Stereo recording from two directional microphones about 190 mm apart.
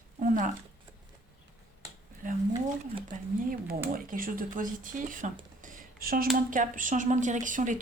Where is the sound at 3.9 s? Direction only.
45° right (ahead or behind).